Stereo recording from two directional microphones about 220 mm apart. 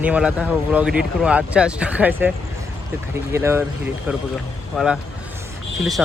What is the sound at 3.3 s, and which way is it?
Speech, 10° right (ahead or behind).